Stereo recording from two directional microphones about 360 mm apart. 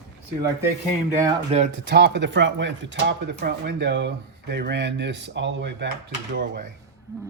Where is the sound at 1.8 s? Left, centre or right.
Right.